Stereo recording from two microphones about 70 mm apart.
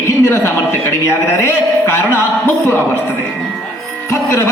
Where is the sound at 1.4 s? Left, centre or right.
Left.